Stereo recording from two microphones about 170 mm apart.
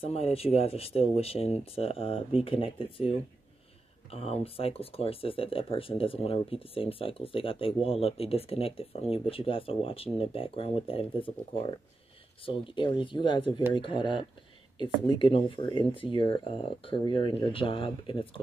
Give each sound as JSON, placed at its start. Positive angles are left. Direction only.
{"t": 0.0, "sound": "speech", "side_deg": 35}